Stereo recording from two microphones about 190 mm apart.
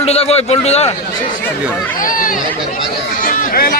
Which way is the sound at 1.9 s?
45° left (ahead or behind).